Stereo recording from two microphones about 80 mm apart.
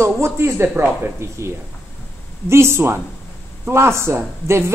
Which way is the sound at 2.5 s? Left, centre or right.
Right.